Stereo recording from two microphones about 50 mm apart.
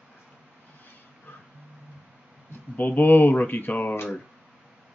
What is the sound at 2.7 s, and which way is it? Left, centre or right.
Speech, left.